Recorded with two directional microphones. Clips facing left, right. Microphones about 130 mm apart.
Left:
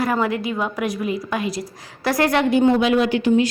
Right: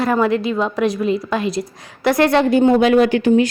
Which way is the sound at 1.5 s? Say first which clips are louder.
Right 5 dB; 25° right (ahead or behind).